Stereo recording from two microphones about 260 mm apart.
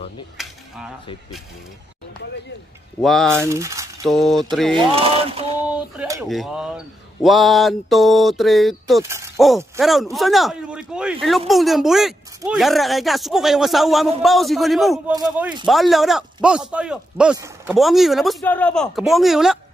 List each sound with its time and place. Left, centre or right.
0.4 s a sound: centre
3.0 s speech: centre
3.4 s speech: centre
4.1 s speech: centre
4.7 s speech: right
5.9 s speech: centre
6.2 s speech: centre
9.0 s speech: centre
15.1 s speech: centre
15.6 s speech: centre